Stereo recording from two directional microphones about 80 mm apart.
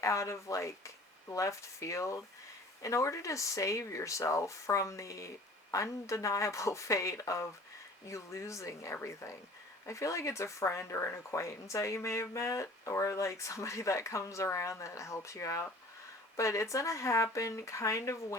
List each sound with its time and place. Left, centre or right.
0.0 s speech: left